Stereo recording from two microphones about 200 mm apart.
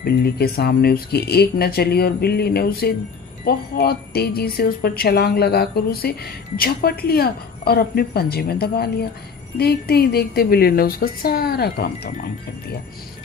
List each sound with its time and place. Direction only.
0.0 s speech: 50° left (ahead or behind)